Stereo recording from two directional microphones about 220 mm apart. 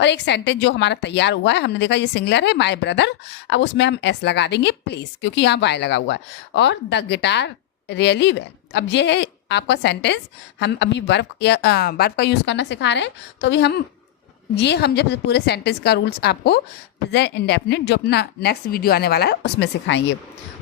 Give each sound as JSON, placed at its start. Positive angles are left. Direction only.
{"t": 0.0, "sound": "a woman's voice", "side_deg": 50}